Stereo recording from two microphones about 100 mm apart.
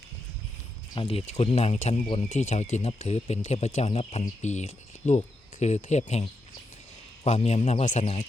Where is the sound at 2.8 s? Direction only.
90° left.